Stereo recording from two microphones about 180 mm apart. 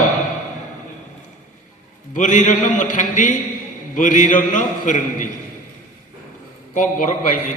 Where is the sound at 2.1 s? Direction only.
45° left (ahead or behind).